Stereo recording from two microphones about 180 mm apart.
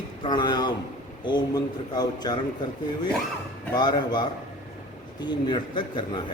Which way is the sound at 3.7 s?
25° left (ahead or behind).